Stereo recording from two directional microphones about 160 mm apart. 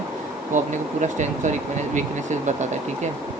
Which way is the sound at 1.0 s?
50° right (ahead or behind).